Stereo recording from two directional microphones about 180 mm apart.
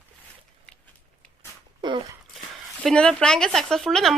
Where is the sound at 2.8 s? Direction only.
5° left (ahead or behind).